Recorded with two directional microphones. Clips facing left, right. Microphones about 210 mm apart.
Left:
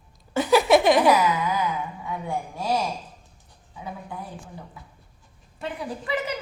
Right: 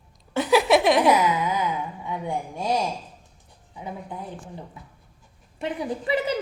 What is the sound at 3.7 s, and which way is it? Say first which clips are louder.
Speech: right 1 dB; 20° right (ahead or behind).